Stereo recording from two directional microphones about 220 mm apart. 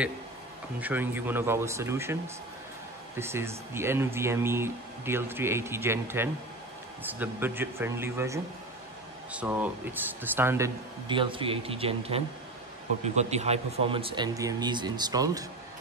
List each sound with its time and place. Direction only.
0.7 s speech: 10° right (ahead or behind)
11.1 s speech: 25° right (ahead or behind)